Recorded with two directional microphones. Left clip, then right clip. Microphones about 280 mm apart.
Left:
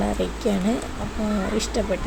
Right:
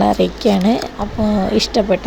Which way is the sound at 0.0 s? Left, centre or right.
Right.